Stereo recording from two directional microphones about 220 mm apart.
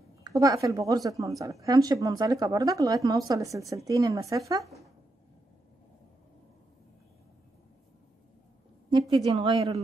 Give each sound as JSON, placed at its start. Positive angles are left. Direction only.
{"t": 0.2, "sound": "a woman's voice", "side_deg": -15}
{"t": 9.1, "sound": "a woman's voice", "side_deg": -25}